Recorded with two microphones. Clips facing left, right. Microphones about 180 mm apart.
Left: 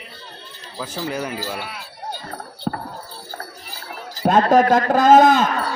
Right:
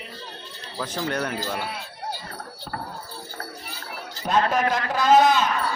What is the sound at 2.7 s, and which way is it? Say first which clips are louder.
Horse: left 9 dB; 55° left (ahead or behind).